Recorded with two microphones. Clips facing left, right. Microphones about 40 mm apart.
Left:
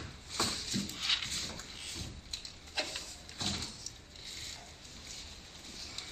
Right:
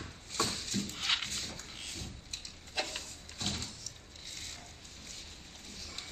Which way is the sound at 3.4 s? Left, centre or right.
Centre.